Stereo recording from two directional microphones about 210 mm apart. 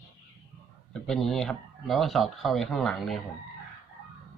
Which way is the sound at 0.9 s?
Centre (ahead or behind).